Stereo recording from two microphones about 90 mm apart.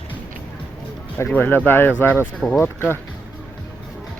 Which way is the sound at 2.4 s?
5° left (ahead or behind).